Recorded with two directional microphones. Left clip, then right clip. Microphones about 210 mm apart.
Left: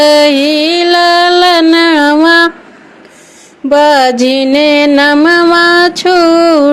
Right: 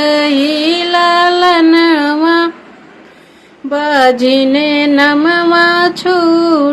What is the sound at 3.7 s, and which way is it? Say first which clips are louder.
Music: left 4 dB; 35° left (ahead or behind).